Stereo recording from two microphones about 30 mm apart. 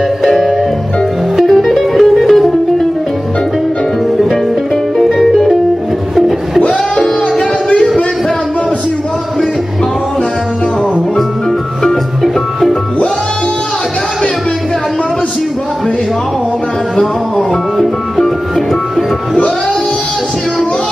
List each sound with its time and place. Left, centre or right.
1.3 s music: centre
5.1 s music: centre
6.6 s a sound: left